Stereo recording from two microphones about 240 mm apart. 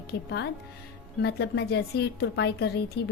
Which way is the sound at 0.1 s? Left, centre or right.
Left.